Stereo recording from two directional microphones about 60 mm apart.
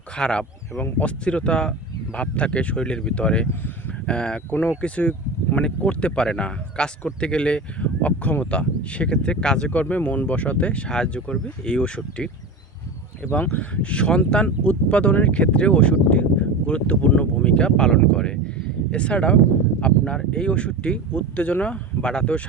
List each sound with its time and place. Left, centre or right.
0.2 s speech: centre
13.4 s speech: left